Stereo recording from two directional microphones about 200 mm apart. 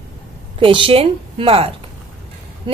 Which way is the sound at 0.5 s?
25° right (ahead or behind).